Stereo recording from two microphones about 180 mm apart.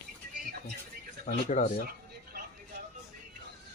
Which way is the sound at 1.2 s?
45° left (ahead or behind).